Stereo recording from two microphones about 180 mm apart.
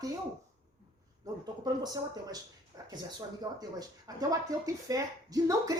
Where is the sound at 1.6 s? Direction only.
20° right (ahead or behind).